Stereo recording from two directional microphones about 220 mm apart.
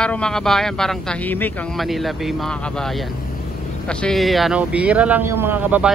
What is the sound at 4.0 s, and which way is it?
Speech, centre (ahead or behind).